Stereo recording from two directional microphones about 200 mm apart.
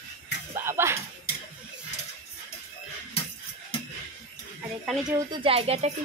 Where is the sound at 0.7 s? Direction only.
15° right (ahead or behind).